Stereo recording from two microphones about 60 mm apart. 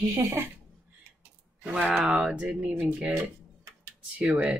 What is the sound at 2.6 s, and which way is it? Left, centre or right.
Speech, right.